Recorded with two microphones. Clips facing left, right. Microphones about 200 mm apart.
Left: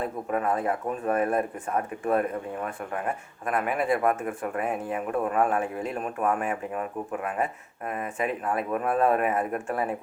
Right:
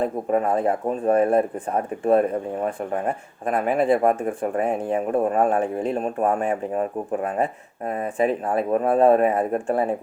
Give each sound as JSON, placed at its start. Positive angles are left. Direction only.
{"t": 0.0, "sound": "speech", "side_deg": -30}
{"t": 3.4, "sound": "speech", "side_deg": -30}